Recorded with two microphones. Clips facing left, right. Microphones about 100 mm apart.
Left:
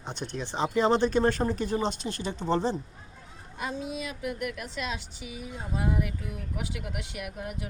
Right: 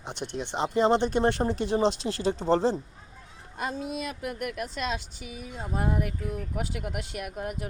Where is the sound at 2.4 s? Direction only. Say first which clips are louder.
Right 2 dB; 35° right (ahead or behind).